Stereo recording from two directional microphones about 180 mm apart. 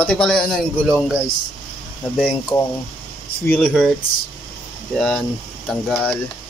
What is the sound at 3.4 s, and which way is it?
Speech, 10° left (ahead or behind).